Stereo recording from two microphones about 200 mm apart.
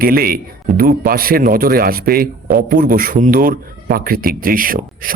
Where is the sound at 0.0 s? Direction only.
45° right (ahead or behind).